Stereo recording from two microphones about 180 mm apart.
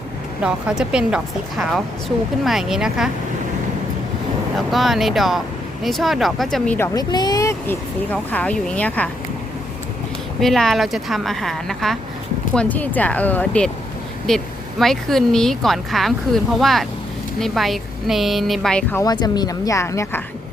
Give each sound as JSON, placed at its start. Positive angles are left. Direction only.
{"t": 0.4, "sound": "speech", "side_deg": -5}
{"t": 4.5, "sound": "speech", "side_deg": 0}
{"t": 10.4, "sound": "speech", "side_deg": 0}
{"t": 19.0, "sound": "speech", "side_deg": 20}